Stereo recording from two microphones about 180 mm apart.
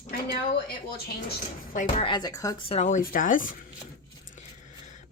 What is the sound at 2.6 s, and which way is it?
Speech, 40° left (ahead or behind).